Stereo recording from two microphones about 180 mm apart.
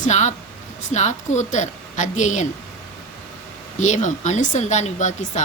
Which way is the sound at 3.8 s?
45° left (ahead or behind).